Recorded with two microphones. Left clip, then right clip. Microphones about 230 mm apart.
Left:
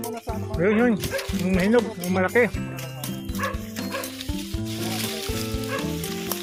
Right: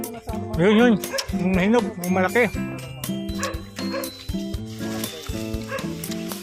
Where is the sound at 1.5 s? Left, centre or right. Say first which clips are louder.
Even; centre.